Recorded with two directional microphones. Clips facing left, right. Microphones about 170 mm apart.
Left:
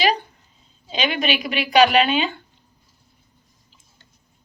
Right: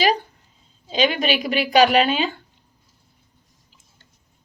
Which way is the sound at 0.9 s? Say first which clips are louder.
Right 3 dB; 40° right (ahead or behind).